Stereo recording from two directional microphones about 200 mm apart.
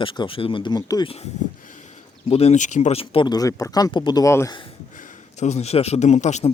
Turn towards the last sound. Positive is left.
turn(degrees=35)  # may be behind; listen again after turning